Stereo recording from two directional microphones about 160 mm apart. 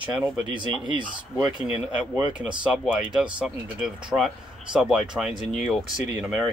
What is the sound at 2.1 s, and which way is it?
Speech, 5° right (ahead or behind).